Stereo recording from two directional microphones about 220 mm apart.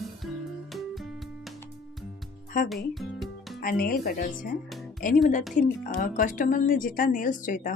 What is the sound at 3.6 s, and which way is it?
Speech, 40° left (ahead or behind).